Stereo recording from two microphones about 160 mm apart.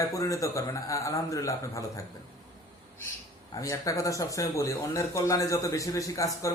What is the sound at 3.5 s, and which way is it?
Speech, 20° left (ahead or behind).